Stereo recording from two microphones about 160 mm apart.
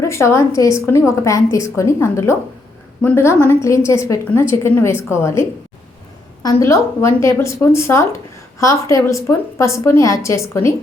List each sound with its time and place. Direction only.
0.0 s a woman's voice: 15° left (ahead or behind)